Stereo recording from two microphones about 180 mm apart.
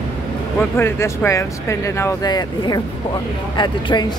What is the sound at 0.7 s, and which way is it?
Speech, 15° left (ahead or behind).